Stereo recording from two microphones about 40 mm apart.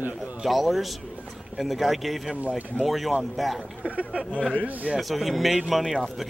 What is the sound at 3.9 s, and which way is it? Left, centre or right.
Speech, right.